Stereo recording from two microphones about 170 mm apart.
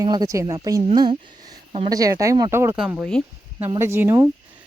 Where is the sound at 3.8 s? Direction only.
15° right (ahead or behind).